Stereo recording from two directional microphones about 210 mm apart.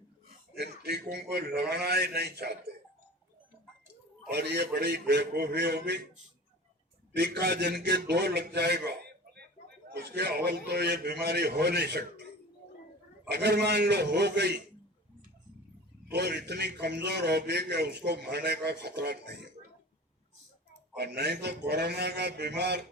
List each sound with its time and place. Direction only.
0.5 s a man's voice: 50° right (ahead or behind)
4.3 s a man's voice: 50° right (ahead or behind)
7.2 s a man's voice: 50° right (ahead or behind)
13.2 s a man's voice: 50° right (ahead or behind)
16.1 s a man's voice: 50° right (ahead or behind)
20.9 s a man's voice: 50° right (ahead or behind)